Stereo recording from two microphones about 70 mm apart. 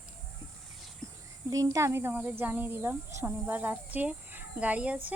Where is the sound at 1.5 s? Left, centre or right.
Right.